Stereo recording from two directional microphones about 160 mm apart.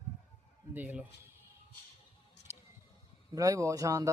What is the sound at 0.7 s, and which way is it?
Speech, 10° right (ahead or behind).